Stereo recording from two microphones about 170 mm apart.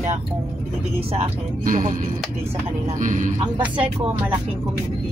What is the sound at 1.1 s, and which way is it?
Speech, 50° right (ahead or behind).